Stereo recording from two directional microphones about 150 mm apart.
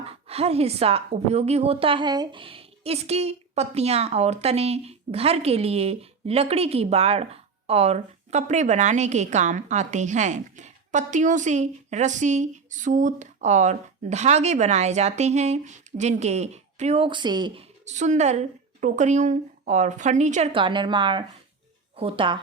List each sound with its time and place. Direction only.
0.0 s a woman's voice: 40° right (ahead or behind)
17.8 s a woman's voice: 50° right (ahead or behind)
20.5 s a woman's voice: 35° right (ahead or behind)